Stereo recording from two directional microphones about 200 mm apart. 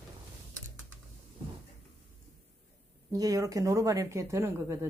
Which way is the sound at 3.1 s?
15° right (ahead or behind).